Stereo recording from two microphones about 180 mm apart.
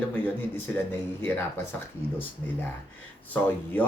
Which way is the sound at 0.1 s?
10° left (ahead or behind).